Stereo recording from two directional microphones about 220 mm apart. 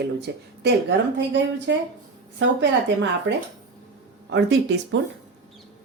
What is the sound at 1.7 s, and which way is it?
A woman's voice, 55° right (ahead or behind).